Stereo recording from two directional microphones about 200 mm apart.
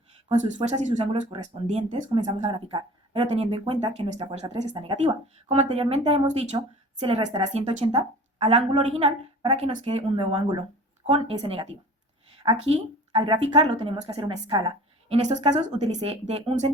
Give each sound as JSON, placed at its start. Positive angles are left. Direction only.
{"t": 0.3, "sound": "speech", "side_deg": -35}
{"t": 2.5, "sound": "speech", "side_deg": -25}
{"t": 5.0, "sound": "speech", "side_deg": -35}